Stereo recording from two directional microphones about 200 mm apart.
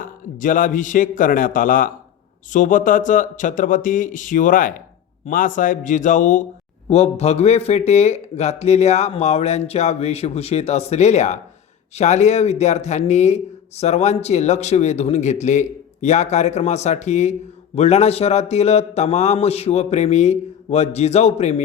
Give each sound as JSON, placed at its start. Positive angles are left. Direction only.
{"t": 0.0, "sound": "a man's voice", "side_deg": 40}